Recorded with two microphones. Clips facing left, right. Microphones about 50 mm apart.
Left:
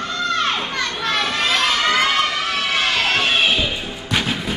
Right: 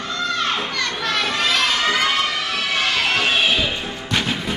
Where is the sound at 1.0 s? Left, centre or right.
Left.